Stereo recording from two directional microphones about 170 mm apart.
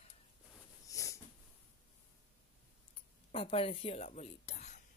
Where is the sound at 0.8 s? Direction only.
20° left (ahead or behind).